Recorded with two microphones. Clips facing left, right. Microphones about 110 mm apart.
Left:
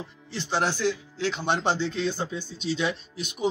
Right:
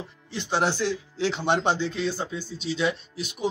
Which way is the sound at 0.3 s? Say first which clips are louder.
Right 2 dB; 15° right (ahead or behind).